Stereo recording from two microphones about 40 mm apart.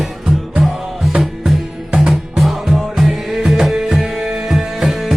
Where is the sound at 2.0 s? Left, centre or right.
Centre.